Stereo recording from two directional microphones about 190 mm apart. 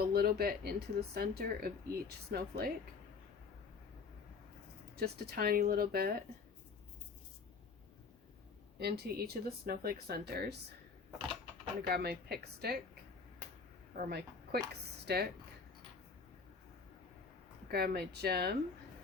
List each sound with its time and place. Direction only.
0.0 s speech: 55° right (ahead or behind)
4.9 s speech: 55° right (ahead or behind)
8.8 s speech: 55° right (ahead or behind)
11.9 s speech: 55° right (ahead or behind)
13.9 s a woman's voice: 50° right (ahead or behind)
17.7 s speech: 55° right (ahead or behind)